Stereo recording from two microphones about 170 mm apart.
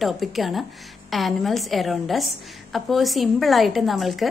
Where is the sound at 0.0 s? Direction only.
Centre (ahead or behind).